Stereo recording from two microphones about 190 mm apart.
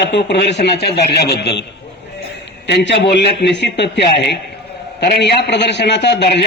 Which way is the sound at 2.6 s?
65° left (ahead or behind).